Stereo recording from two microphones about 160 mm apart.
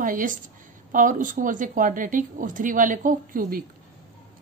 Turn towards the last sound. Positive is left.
turn(degrees=-60)  # may be behind; listen again after turning